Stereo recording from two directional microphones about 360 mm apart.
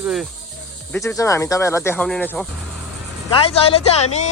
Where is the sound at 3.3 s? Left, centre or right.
Centre.